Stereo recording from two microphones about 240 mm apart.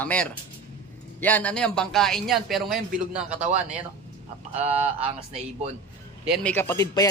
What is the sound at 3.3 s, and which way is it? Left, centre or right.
Speech, right.